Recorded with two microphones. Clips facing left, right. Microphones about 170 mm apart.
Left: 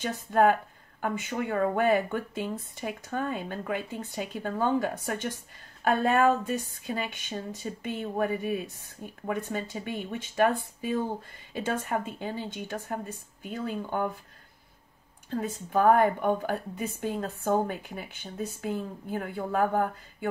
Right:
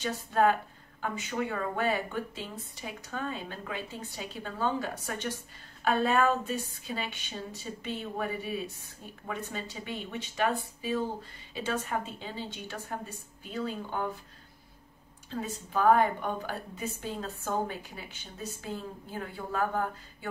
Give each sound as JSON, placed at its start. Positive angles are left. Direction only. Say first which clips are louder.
{"t": 0.0, "sound": "a woman's voice", "louder": "left 3 dB", "side_deg": 50}
{"t": 15.2, "sound": "a woman's voice", "louder": "left 4 dB", "side_deg": 55}